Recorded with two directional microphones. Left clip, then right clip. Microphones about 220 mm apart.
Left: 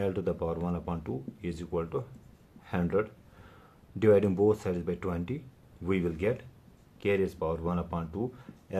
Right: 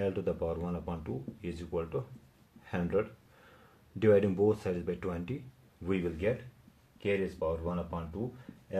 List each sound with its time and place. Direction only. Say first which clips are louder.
0.0 s speech: left 2 dB; 20° left (ahead or behind)